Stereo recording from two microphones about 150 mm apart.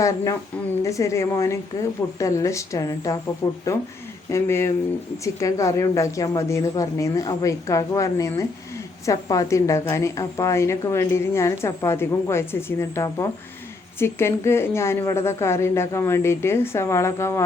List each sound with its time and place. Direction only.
0.9 s a woman's voice: 20° left (ahead or behind)